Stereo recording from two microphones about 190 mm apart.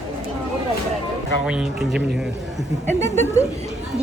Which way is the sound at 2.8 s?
10° left (ahead or behind).